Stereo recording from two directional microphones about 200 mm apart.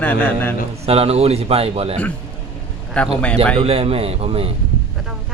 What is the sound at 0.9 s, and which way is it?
Speech, 30° right (ahead or behind).